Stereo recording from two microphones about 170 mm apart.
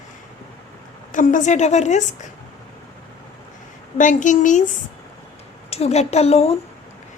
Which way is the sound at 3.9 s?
45° left (ahead or behind).